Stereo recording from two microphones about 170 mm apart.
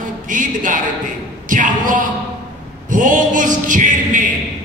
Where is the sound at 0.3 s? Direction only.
50° right (ahead or behind).